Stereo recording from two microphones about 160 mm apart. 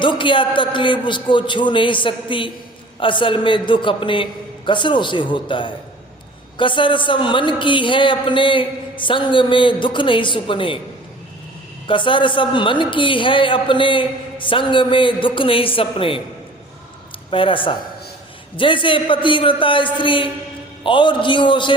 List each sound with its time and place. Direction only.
0.0 s a man's voice: 30° left (ahead or behind)
11.9 s a man's voice: 30° left (ahead or behind)
17.3 s a man's voice: 30° left (ahead or behind)